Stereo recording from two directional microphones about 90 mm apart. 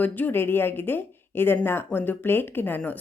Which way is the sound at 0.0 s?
20° left (ahead or behind).